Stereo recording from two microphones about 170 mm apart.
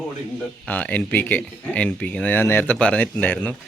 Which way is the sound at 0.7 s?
10° left (ahead or behind).